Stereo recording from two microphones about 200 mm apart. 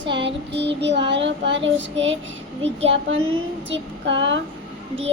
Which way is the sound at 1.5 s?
65° right (ahead or behind).